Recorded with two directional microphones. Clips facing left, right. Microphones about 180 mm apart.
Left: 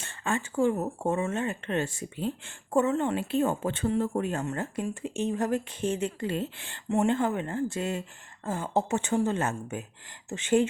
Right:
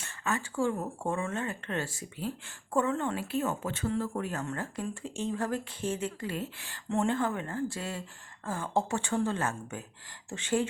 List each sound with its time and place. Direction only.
0.0 s speech: 25° left (ahead or behind)